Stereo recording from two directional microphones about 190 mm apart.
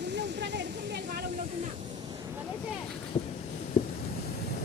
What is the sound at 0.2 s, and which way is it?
Waterfall, 65° right (ahead or behind).